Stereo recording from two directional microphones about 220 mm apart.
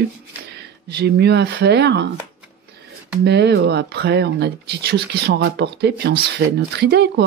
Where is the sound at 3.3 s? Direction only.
50° right (ahead or behind).